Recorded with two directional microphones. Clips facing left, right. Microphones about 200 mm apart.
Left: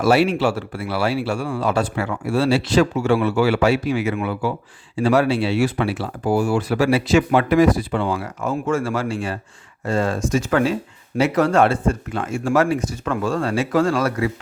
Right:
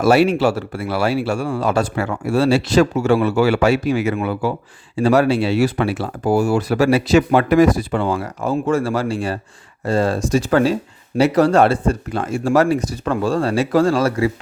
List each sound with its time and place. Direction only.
0.0 s speech: 45° right (ahead or behind)